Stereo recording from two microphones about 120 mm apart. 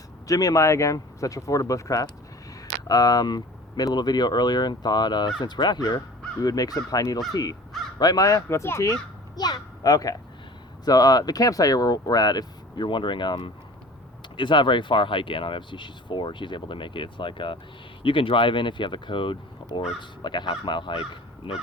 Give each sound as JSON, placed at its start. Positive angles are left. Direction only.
{"t": 0.3, "sound": "speech", "side_deg": 30}
{"t": 9.3, "sound": "a child's voice", "side_deg": 35}